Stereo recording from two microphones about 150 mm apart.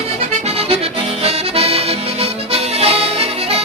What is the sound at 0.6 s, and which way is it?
Accordion, 40° right (ahead or behind).